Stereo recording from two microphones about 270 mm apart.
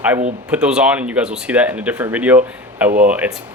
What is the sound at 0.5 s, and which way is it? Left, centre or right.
Speech, centre.